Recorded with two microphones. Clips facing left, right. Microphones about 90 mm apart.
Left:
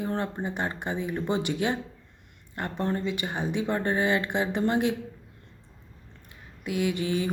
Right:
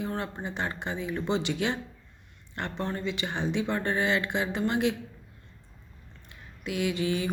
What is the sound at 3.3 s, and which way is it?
Speech, 15° left (ahead or behind).